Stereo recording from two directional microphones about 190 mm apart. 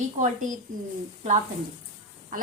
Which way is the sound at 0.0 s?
40° right (ahead or behind).